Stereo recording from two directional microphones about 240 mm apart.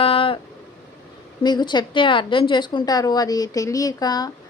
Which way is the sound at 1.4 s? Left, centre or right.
Centre.